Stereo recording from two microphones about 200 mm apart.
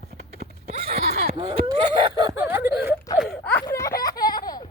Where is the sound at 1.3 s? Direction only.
30° right (ahead or behind).